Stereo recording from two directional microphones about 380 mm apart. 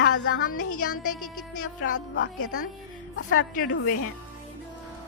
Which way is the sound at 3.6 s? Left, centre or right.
Left.